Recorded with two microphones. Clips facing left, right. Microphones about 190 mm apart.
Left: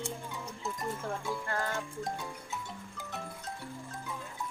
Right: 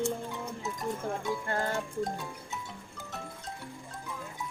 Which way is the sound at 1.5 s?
30° right (ahead or behind).